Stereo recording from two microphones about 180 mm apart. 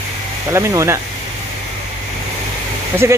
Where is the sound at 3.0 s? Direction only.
15° right (ahead or behind).